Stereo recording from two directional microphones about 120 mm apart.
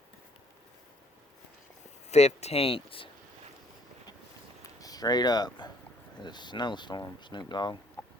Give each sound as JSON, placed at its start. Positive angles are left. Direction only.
{"t": 2.0, "sound": "speech", "side_deg": 65}
{"t": 4.6, "sound": "speech", "side_deg": 30}
{"t": 8.0, "sound": "a sound", "side_deg": 10}